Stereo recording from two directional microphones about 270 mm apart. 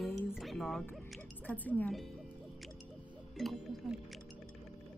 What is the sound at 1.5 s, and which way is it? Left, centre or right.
Speech, centre.